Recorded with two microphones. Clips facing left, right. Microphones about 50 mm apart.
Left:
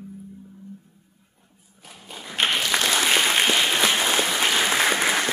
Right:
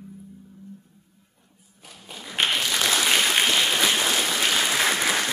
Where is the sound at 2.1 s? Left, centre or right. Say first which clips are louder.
Left 1 dB; centre.